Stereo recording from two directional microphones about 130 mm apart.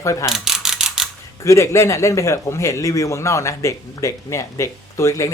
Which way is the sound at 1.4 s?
20° left (ahead or behind).